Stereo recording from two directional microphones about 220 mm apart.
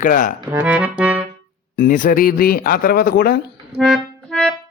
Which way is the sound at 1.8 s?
40° left (ahead or behind).